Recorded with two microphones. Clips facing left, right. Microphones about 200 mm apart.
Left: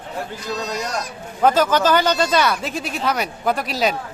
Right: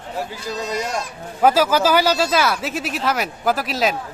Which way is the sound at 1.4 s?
10° right (ahead or behind).